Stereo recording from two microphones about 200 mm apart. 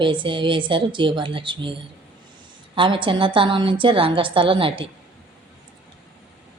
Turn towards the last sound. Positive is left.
turn(degrees=-25)  # may be behind; listen again after turning